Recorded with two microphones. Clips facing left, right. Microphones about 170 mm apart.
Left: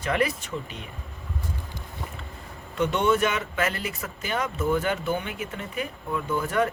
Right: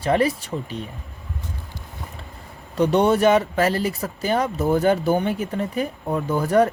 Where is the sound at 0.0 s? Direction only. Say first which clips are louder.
Right 6 dB; 30° right (ahead or behind).